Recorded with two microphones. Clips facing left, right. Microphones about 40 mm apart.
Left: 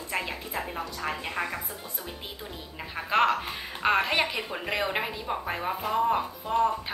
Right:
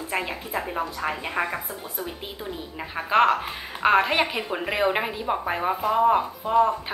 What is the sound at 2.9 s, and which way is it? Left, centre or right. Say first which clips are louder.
A woman's voice: right 4 dB; centre.